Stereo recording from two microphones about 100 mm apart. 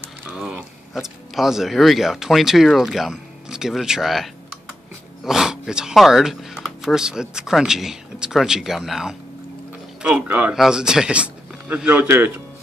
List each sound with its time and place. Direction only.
0.3 s speech: 10° right (ahead or behind)
10.0 s speech: 15° right (ahead or behind)
10.5 s speech: 5° right (ahead or behind)